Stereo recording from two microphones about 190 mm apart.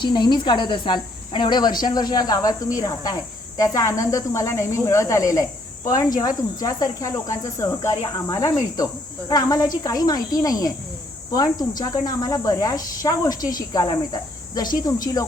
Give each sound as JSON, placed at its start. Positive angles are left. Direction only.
{"t": 0.0, "sound": "speech", "side_deg": 25}